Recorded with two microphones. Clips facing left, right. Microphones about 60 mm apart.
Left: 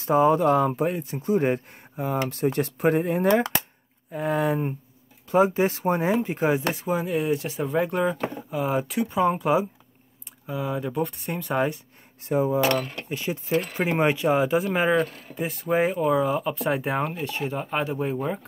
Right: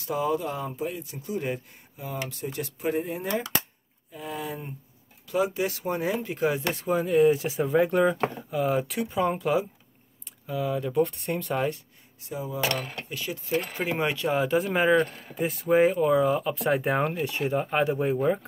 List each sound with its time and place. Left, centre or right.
0.0 s speech: left
0.4 s speech: left
5.3 s speech: left
6.7 s speech: centre
10.9 s speech: centre
12.2 s speech: left
13.1 s speech: left; by 14.6 s centre
14.6 s speech: centre